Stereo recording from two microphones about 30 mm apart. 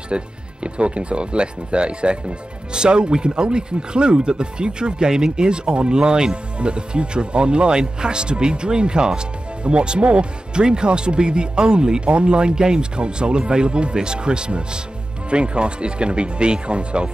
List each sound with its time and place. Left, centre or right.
0.1 s speech: right